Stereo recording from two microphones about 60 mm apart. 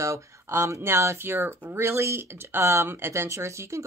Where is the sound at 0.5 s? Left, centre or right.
Right.